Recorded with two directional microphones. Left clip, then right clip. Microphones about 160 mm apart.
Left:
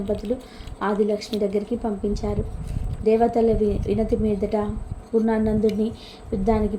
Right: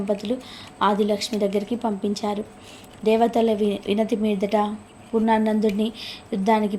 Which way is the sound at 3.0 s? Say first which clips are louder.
Even; 20° right (ahead or behind).